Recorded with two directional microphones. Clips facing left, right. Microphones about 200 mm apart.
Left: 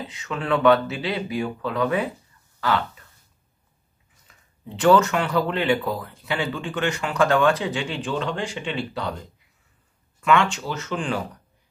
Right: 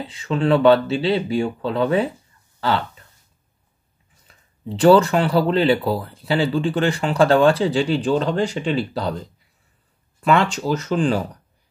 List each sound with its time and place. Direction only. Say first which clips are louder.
0.0 s speech: right 8 dB; 30° right (ahead or behind)
4.6 s speech: right 4 dB; 35° right (ahead or behind)
10.2 s speech: right 3 dB; 35° right (ahead or behind)